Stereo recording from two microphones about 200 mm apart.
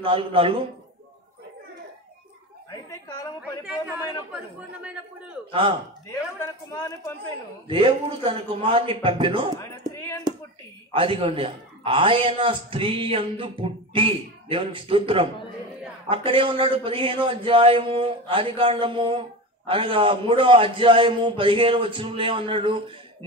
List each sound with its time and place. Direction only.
0.0 s speech: 25° right (ahead or behind)
4.3 s speech: 5° right (ahead or behind)
5.5 s speech: 25° right (ahead or behind)
6.0 s speech: 15° left (ahead or behind)
7.6 s speech: 25° right (ahead or behind)
9.6 s speech: 15° left (ahead or behind)
10.9 s speech: 25° right (ahead or behind)